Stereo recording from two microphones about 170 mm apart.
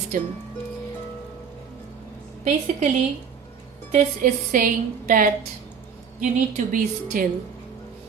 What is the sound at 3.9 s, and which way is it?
A woman's voice, 50° right (ahead or behind).